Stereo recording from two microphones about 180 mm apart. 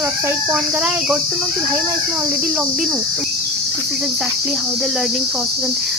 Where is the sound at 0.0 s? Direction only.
15° right (ahead or behind).